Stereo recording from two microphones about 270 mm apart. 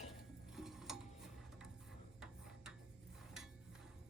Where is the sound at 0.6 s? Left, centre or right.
Centre.